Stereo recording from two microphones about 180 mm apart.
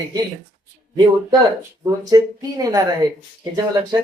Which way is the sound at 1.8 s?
20° right (ahead or behind).